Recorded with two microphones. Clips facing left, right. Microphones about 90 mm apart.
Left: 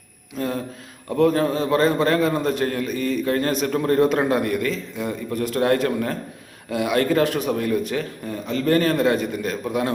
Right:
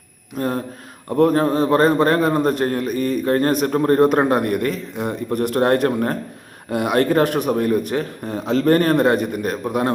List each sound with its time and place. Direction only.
0.3 s a man's voice: 50° right (ahead or behind)
5.5 s a man's voice: 50° right (ahead or behind)
7.5 s a man's voice: 40° right (ahead or behind)
8.2 s a man's voice: 75° right (ahead or behind); by 9.9 s 45° right (ahead or behind)